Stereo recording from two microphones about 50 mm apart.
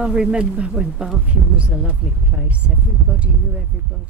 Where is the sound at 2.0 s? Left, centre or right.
Right.